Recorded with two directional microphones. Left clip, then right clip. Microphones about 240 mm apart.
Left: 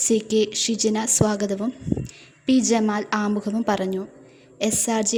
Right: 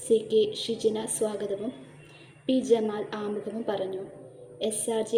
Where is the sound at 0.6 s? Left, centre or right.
Left.